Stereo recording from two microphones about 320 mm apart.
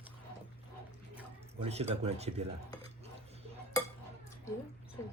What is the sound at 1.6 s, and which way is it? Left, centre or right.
Speech, centre.